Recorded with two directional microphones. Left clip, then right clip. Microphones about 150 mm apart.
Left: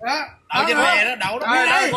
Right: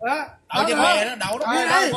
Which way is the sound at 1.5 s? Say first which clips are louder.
Left 2 dB; 10° right (ahead or behind).